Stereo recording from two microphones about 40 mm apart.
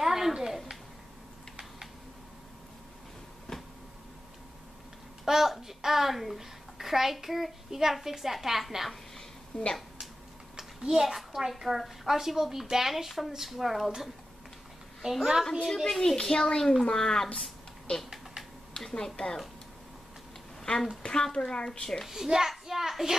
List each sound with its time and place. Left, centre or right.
0.0 s a sound: centre
5.2 s a child's voice: centre
9.5 s speech: left
10.8 s a woman's voice: centre
15.7 s a child's voice: centre
18.9 s a child's voice: centre
21.0 s speech: centre
22.0 s a woman's voice: centre